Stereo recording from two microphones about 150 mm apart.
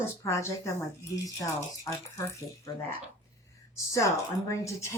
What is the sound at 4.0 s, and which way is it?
Speech, 20° left (ahead or behind).